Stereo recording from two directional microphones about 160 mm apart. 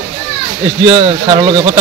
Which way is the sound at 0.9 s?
25° right (ahead or behind).